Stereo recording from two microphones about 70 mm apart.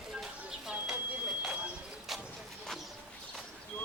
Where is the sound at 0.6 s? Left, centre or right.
Centre.